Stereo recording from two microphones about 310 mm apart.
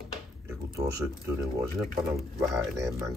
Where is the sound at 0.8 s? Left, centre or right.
Centre.